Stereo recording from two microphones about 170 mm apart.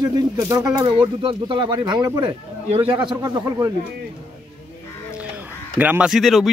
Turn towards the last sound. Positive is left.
turn(degrees=0)  # may be behind; listen again after turning